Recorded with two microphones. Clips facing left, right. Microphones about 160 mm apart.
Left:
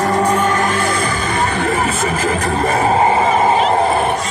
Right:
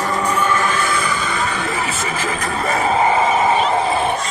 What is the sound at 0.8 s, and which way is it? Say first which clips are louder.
Music: left 3 dB; 50° left (ahead or behind).